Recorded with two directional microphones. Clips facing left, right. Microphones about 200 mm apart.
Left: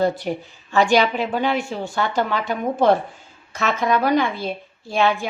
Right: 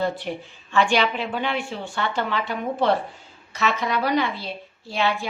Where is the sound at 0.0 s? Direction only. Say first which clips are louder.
Left 5 dB; 40° left (ahead or behind).